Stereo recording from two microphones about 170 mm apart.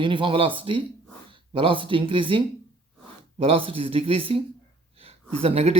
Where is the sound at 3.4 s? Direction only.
35° right (ahead or behind).